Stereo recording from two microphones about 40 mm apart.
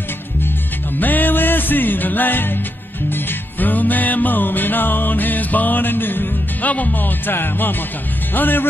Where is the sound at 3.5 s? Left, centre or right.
Left.